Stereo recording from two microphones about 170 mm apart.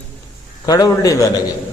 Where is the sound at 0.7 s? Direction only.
20° left (ahead or behind).